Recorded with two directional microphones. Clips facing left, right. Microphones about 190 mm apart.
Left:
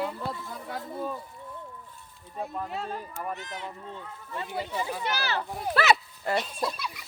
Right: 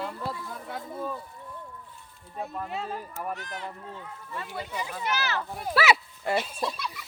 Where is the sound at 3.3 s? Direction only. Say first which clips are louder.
Even; 20° left (ahead or behind).